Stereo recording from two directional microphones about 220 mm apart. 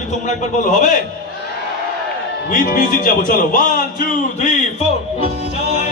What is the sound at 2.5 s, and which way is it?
A man's voice, 40° left (ahead or behind).